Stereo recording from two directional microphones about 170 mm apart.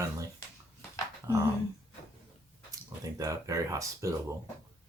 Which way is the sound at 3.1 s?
20° right (ahead or behind).